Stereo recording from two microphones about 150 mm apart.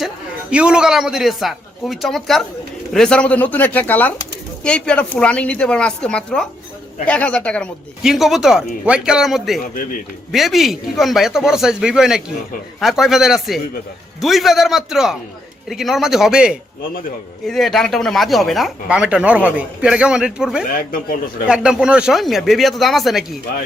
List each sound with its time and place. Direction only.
0.5 s a woman's voice: 5° right (ahead or behind)
20.7 s speech: 75° left (ahead or behind)
21.4 s speech: 5° right (ahead or behind)